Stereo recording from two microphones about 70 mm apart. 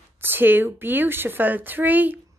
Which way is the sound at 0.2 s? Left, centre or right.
Right.